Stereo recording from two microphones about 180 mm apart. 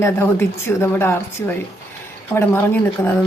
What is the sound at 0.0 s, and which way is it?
A woman's voice, 15° left (ahead or behind).